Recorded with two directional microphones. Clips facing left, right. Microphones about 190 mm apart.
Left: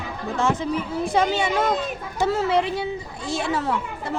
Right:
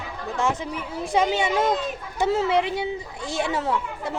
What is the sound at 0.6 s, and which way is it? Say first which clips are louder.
Speech: left 5 dB; 15° right (ahead or behind).